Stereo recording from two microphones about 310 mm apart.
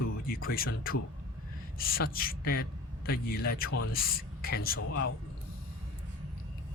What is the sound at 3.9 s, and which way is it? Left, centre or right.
Speech, left.